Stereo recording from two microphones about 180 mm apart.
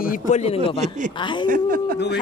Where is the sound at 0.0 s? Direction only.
50° left (ahead or behind).